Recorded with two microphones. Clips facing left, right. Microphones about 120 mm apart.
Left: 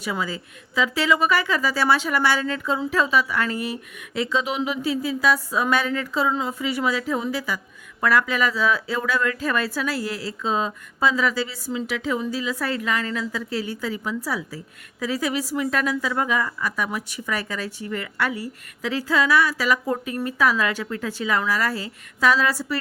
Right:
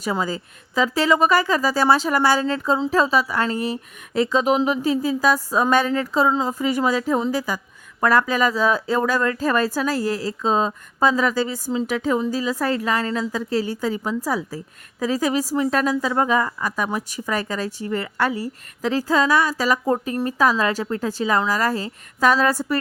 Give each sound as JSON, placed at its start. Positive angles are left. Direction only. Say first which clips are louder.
{"t": 0.0, "sound": "speech", "louder": "right 4 dB", "side_deg": -40}